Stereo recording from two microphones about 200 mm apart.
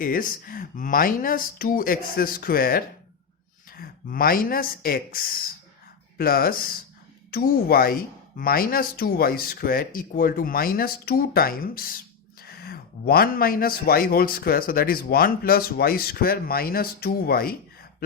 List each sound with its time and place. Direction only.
0.0 s speech: 45° left (ahead or behind)